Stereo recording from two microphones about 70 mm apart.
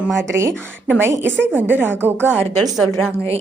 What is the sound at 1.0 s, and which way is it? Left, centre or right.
A woman's voice, right.